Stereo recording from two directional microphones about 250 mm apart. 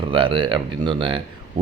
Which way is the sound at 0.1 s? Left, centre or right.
Centre.